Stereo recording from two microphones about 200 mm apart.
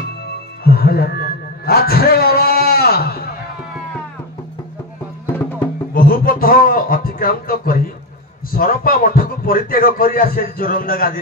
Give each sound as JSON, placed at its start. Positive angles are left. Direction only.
{"t": 0.7, "sound": "a sound", "side_deg": 50}
{"t": 5.3, "sound": "music", "side_deg": 10}
{"t": 5.9, "sound": "a man's voice", "side_deg": 45}